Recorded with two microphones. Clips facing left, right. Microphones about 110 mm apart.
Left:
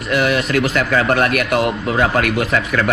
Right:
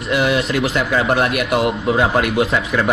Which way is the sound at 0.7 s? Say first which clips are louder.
Even; 15° right (ahead or behind).